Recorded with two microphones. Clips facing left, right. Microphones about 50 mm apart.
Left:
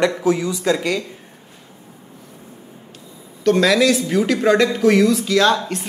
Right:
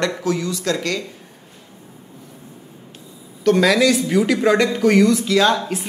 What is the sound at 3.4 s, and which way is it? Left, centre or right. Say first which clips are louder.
Speech: even; centre.